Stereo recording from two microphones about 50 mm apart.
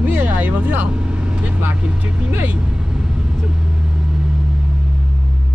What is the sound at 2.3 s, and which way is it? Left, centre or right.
Speech, right.